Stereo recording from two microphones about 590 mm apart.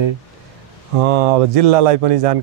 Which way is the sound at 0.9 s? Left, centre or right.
Right.